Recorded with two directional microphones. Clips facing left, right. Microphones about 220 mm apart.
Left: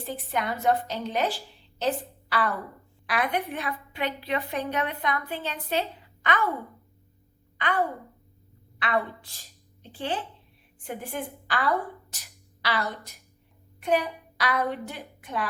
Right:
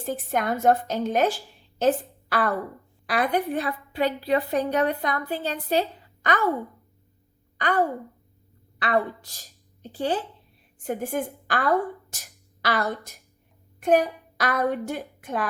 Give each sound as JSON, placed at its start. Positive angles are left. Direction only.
{"t": 0.0, "sound": "a woman's voice", "side_deg": -45}
{"t": 7.6, "sound": "a woman's voice", "side_deg": -40}
{"t": 9.5, "sound": "a sound", "side_deg": -40}
{"t": 10.8, "sound": "a woman's voice", "side_deg": -45}